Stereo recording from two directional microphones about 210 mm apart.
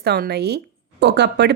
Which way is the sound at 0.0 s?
50° right (ahead or behind).